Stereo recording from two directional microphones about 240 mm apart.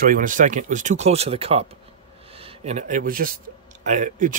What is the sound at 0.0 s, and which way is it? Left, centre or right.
Speech, right.